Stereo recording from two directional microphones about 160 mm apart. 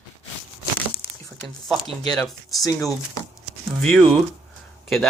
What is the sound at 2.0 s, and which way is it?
Speech, centre (ahead or behind).